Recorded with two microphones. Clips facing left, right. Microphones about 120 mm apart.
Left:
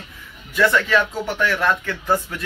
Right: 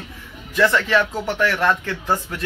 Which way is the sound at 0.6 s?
30° right (ahead or behind).